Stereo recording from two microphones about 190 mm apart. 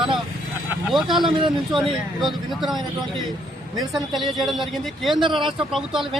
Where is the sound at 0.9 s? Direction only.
Centre (ahead or behind).